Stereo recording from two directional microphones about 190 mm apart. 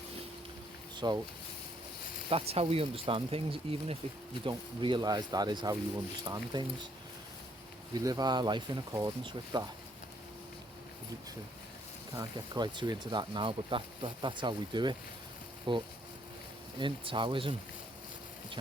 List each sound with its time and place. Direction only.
0.9 s speech: 20° right (ahead or behind)
2.3 s speech: 30° right (ahead or behind)
7.9 s speech: 20° right (ahead or behind)
12.1 s speech: 25° right (ahead or behind)